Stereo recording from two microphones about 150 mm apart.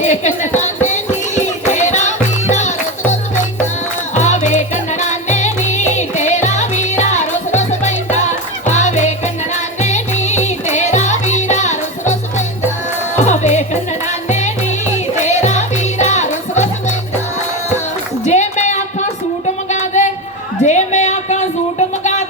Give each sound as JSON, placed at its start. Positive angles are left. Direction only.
{"t": 0.0, "sound": "music", "side_deg": 50}
{"t": 4.1, "sound": "music", "side_deg": 50}
{"t": 13.1, "sound": "music", "side_deg": 50}
{"t": 18.3, "sound": "a sound", "side_deg": 50}